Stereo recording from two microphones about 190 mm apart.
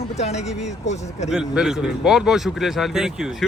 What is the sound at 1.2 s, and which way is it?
Speech, 5° right (ahead or behind).